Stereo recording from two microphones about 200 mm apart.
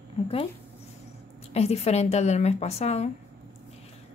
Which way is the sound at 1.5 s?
30° left (ahead or behind).